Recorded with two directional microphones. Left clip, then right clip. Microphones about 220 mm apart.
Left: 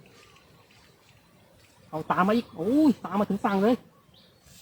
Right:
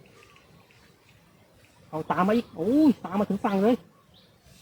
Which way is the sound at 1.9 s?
15° left (ahead or behind).